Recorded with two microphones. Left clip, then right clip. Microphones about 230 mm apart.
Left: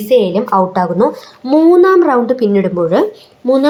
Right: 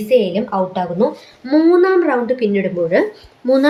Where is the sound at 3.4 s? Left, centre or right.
Centre.